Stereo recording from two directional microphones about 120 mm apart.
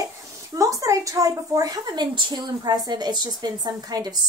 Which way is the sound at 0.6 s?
25° right (ahead or behind).